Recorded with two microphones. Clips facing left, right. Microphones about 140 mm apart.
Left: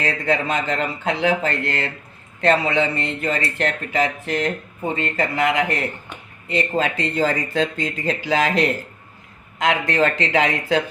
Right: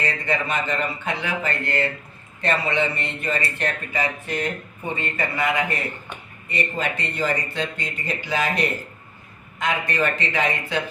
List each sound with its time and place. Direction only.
0.0 s speech: 90° left